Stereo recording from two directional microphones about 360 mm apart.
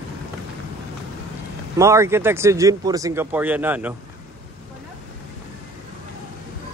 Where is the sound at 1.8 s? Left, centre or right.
Centre.